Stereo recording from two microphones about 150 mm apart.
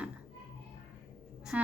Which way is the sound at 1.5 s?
5° right (ahead or behind).